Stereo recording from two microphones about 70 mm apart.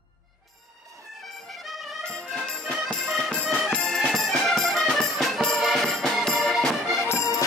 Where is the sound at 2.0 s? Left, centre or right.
Centre.